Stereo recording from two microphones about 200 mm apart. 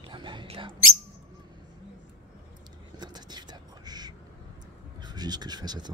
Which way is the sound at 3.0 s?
20° right (ahead or behind).